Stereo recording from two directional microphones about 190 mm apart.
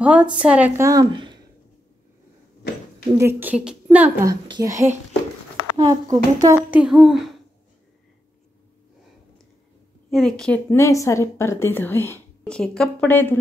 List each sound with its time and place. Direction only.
0.0 s a woman's voice: 5° right (ahead or behind); by 1.4 s 20° right (ahead or behind)
3.2 s a woman's voice: 10° right (ahead or behind)
4.3 s a woman's voice: 20° right (ahead or behind)
5.9 s a woman's voice: 20° right (ahead or behind)
6.7 s speech: 5° right (ahead or behind)
10.1 s a woman's voice: centre (ahead or behind)